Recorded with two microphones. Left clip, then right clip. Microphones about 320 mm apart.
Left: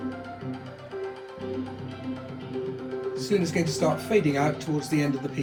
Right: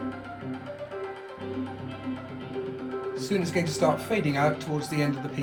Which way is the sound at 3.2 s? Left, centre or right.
Centre.